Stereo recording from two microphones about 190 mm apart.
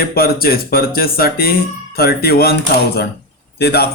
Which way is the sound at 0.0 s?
55° left (ahead or behind).